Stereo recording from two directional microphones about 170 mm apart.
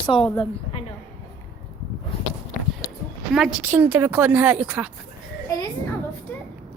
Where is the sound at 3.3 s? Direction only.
Centre (ahead or behind).